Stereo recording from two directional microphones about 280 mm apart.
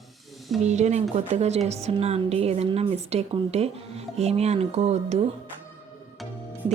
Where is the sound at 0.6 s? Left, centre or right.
Right.